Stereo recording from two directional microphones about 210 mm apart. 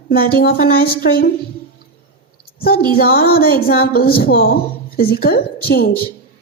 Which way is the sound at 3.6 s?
45° left (ahead or behind).